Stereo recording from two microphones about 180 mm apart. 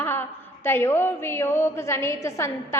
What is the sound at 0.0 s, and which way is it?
A woman's voice, 10° left (ahead or behind).